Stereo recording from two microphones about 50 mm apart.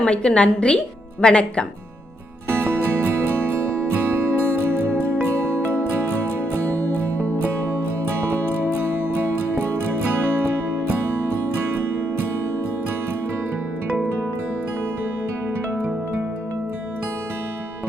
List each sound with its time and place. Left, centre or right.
0.0 s a woman's voice: centre
3.5 s music: right
8.8 s music: right
10.3 s music: right